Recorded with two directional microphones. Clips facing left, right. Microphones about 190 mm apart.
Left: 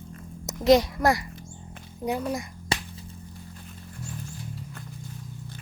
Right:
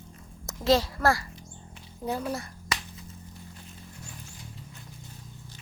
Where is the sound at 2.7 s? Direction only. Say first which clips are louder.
Left 4 dB; 30° left (ahead or behind).